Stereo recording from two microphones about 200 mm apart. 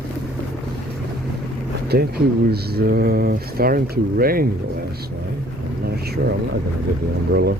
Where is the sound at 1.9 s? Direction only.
50° right (ahead or behind).